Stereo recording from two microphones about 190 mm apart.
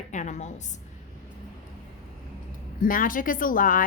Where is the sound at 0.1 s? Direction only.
40° left (ahead or behind).